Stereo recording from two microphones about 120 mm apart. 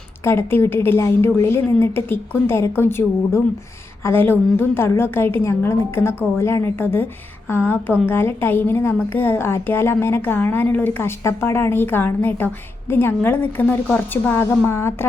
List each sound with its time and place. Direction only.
0.3 s a woman's voice: 20° left (ahead or behind)